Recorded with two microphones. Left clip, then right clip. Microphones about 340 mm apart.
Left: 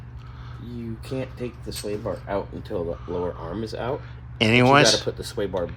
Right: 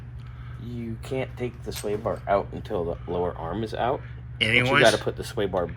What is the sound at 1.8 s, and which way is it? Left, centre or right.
Speech, right.